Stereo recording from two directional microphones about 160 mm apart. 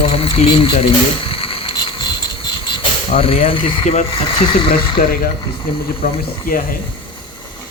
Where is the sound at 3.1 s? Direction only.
35° left (ahead or behind).